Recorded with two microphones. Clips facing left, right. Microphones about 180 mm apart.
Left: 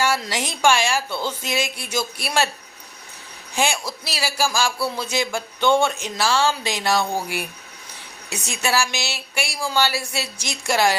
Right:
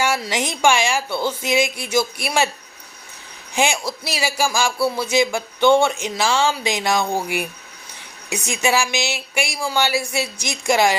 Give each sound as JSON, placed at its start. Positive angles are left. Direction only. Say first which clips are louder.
{"t": 0.0, "sound": "a woman's voice", "louder": "right 1 dB", "side_deg": -10}
{"t": 3.5, "sound": "a woman's voice", "louder": "right 3 dB", "side_deg": -15}
{"t": 8.3, "sound": "a woman's voice", "louder": "right 4 dB", "side_deg": -15}